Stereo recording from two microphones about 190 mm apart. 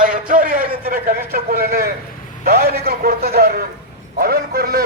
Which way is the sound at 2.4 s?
55° right (ahead or behind).